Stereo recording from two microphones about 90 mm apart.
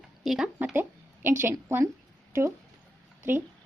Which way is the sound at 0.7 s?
25° right (ahead or behind).